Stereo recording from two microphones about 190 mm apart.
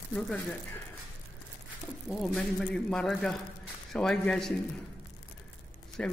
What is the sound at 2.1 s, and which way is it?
Speech, 5° left (ahead or behind).